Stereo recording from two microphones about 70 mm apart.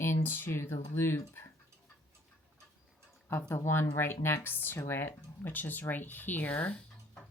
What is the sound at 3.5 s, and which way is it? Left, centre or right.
A woman's voice, left.